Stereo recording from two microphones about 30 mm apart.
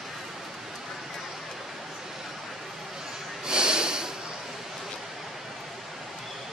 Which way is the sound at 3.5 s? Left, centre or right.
Right.